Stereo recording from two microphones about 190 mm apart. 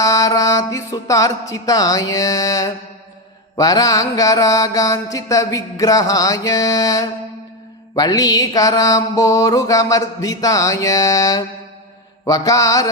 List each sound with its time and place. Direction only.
0.0 s music: 20° left (ahead or behind)
3.6 s mantra: 20° left (ahead or behind)